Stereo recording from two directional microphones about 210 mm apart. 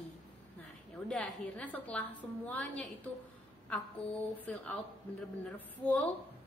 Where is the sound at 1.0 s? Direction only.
5° left (ahead or behind).